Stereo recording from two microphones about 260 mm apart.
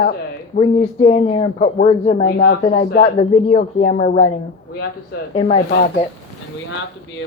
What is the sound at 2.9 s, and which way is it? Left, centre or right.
Speech, left.